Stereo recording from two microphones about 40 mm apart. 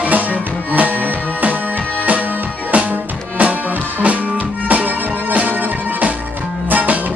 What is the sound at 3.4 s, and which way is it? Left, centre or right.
Music, right.